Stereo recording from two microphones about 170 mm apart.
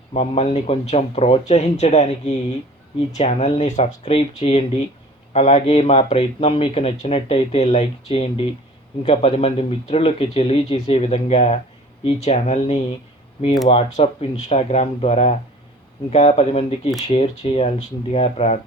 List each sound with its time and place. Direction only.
0.1 s speech: 40° left (ahead or behind)